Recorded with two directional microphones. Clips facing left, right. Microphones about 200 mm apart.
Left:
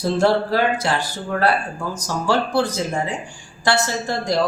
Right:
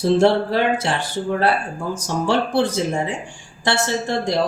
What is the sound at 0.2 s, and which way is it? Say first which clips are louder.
Speech: right 1 dB; 25° right (ahead or behind).